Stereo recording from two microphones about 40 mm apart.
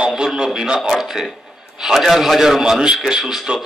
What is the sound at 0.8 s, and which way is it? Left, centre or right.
A man's voice, centre.